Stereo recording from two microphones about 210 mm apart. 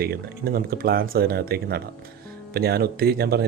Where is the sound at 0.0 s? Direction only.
45° right (ahead or behind).